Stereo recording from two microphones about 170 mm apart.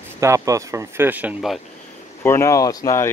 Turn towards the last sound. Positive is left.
turn(degrees=20)  # may be behind; listen again after turning